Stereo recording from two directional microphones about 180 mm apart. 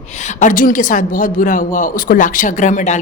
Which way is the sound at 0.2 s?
40° left (ahead or behind).